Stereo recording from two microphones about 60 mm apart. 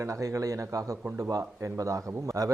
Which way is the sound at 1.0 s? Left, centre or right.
Right.